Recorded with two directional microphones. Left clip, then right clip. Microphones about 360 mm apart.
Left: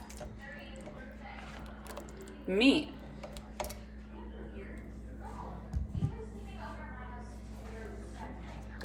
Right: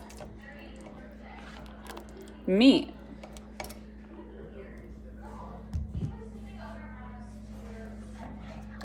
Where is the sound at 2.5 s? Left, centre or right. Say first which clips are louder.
Right 5 dB; right.